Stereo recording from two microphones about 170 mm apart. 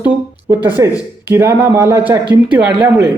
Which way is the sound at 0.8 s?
20° right (ahead or behind).